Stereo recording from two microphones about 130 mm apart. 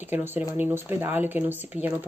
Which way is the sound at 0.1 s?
15° right (ahead or behind).